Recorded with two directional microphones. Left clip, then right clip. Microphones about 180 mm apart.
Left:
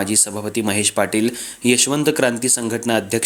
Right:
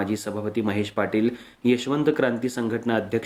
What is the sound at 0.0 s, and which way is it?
Speech, 40° left (ahead or behind).